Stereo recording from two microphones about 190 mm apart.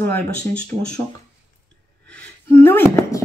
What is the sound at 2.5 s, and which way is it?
Speech, 10° left (ahead or behind).